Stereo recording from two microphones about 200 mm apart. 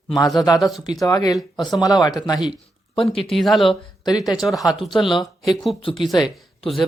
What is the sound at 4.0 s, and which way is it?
Speech, 20° left (ahead or behind).